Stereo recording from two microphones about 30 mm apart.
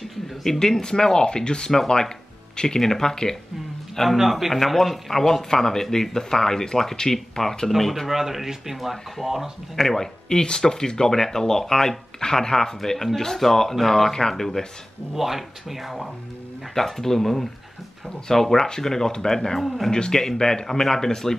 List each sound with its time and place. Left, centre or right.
0.4 s speech: centre
2.8 s speech: centre
3.9 s a man's voice: centre
4.2 s speech: centre
4.6 s speech: centre
5.3 s speech: centre
7.7 s speech: centre
8.1 s speech: centre
9.8 s speech: centre
10.3 s speech: left
15.1 s speech: centre
16.7 s speech: centre